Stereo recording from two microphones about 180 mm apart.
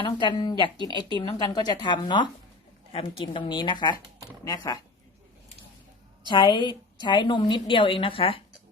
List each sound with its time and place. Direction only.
0.0 s a woman's voice: 25° left (ahead or behind)
6.2 s a woman's voice: 25° left (ahead or behind)